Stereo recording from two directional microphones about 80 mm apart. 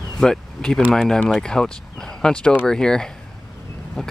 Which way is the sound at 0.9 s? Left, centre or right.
Centre.